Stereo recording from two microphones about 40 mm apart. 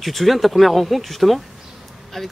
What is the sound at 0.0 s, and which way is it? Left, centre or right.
Speech, centre.